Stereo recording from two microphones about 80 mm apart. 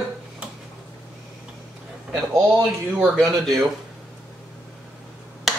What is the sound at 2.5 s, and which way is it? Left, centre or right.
Speech, centre.